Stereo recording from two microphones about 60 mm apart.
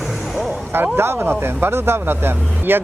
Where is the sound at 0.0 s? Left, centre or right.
Centre.